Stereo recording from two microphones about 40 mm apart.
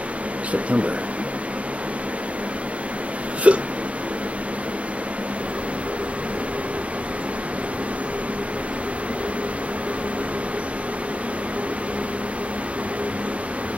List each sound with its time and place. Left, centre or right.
0.5 s speech: right
3.4 s speech: right